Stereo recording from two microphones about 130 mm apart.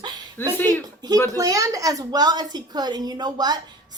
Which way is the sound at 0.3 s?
15° left (ahead or behind).